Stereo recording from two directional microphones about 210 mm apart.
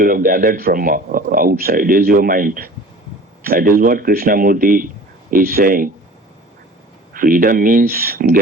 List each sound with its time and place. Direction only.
0.0 s speech: 40° right (ahead or behind)
7.1 s speech: 40° right (ahead or behind)